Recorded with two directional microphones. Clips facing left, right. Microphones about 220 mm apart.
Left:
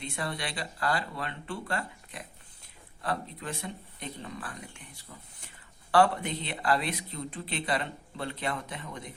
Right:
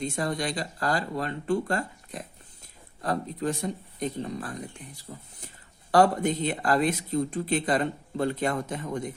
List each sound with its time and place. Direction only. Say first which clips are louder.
0.0 s speech: right 7 dB; 45° right (ahead or behind)